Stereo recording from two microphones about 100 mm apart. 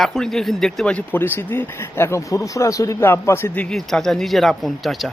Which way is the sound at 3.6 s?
5° left (ahead or behind).